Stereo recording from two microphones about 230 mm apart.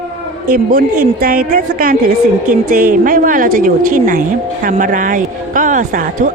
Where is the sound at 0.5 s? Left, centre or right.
Right.